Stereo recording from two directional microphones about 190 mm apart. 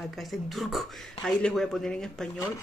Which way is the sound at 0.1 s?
Centre (ahead or behind).